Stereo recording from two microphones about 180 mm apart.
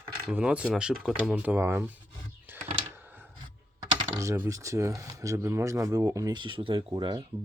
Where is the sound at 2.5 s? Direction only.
10° right (ahead or behind).